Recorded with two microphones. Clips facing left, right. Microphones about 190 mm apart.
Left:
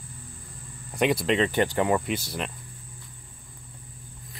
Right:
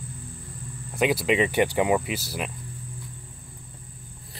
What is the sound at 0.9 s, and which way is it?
Speech, 5° right (ahead or behind).